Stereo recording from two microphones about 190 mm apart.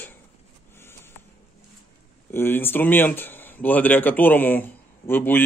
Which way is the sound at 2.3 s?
10° left (ahead or behind).